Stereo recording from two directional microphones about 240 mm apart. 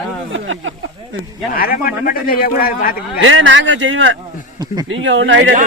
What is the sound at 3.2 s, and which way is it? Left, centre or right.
Speech, right.